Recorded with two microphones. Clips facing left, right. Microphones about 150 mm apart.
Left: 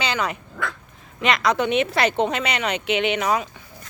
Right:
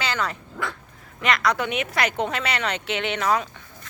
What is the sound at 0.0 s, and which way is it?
Dog, 20° left (ahead or behind).